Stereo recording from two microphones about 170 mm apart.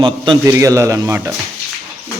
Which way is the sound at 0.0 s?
30° right (ahead or behind).